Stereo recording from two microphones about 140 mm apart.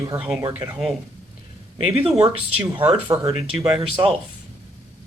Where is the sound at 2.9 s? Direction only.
35° right (ahead or behind).